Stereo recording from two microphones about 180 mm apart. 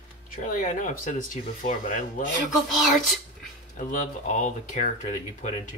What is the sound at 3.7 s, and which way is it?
Speech, 45° left (ahead or behind).